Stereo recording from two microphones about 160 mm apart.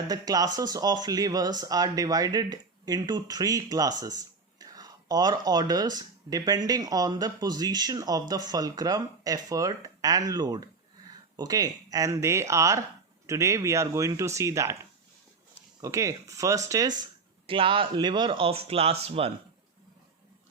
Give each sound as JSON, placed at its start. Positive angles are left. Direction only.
{"t": 0.1, "sound": "speech", "side_deg": -25}
{"t": 15.8, "sound": "speech", "side_deg": -20}
{"t": 17.4, "sound": "speech", "side_deg": -35}